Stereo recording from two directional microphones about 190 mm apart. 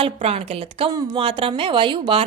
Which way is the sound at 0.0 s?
30° right (ahead or behind).